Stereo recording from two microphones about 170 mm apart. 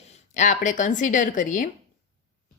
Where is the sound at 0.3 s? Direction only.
45° left (ahead or behind).